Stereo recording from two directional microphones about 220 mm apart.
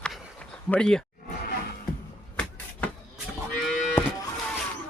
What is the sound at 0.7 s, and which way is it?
Speech, 5° left (ahead or behind).